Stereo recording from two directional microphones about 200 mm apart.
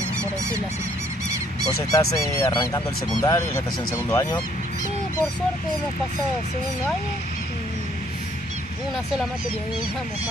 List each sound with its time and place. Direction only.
1.8 s speech: 15° left (ahead or behind)